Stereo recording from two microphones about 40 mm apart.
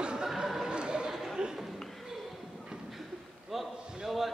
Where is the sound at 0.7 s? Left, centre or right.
Right.